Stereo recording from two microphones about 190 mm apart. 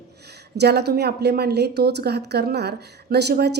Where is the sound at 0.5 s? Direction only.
60° right (ahead or behind).